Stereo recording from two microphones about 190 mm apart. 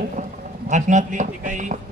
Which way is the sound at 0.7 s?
40° right (ahead or behind).